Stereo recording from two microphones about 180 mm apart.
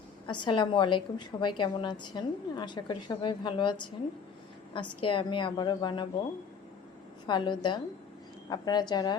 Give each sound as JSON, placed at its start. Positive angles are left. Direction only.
{"t": 0.3, "sound": "a woman's voice", "side_deg": 25}
{"t": 7.3, "sound": "a woman's voice", "side_deg": 25}